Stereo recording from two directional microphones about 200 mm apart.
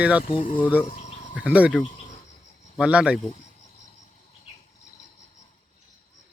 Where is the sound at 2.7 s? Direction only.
5° right (ahead or behind).